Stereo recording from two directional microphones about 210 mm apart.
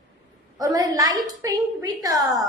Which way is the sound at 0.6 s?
15° right (ahead or behind).